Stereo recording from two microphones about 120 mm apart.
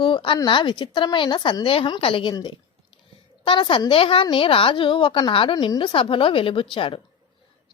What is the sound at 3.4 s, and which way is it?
A woman's voice, 45° left (ahead or behind).